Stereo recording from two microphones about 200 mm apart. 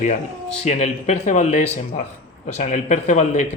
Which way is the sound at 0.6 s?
35° left (ahead or behind).